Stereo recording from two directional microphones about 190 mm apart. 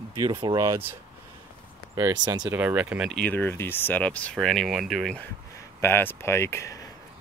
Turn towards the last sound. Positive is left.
turn(degrees=15)  # may be behind; listen again after turning